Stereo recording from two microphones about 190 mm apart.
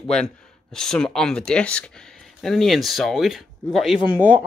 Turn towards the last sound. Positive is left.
turn(degrees=-10)  # may be behind; listen again after turning